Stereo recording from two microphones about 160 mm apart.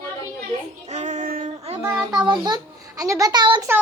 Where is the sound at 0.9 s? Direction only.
45° right (ahead or behind).